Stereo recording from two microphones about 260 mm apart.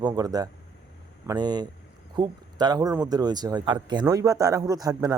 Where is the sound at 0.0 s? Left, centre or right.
Centre.